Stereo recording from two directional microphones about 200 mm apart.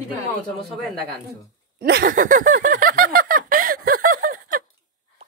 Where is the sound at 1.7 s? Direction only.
50° right (ahead or behind).